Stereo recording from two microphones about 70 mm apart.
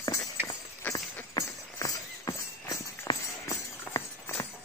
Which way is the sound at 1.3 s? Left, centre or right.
Left.